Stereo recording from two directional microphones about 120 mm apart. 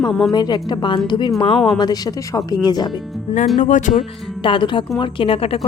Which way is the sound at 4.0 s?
45° left (ahead or behind).